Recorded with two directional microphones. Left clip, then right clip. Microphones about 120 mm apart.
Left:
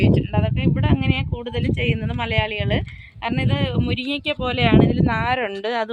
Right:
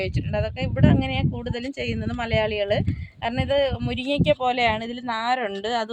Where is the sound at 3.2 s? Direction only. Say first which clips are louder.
Right 2 dB; 90° right.